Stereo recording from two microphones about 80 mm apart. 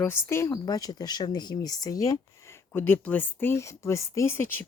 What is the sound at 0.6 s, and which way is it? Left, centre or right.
Speech, left.